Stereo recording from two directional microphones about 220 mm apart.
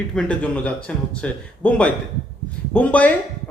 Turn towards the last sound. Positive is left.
turn(degrees=5)  # may be behind; listen again after turning